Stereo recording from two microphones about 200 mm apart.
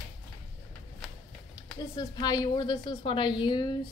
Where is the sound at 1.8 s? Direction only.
20° left (ahead or behind).